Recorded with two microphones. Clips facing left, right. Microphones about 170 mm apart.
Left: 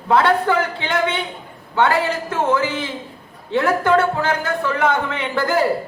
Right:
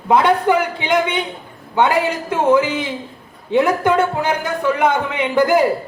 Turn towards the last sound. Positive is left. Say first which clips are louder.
# right 5 dB
turn(degrees=-15)  # may be behind; listen again after turning